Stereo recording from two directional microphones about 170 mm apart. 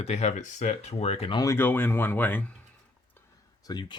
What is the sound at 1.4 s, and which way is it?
Speech, 15° left (ahead or behind).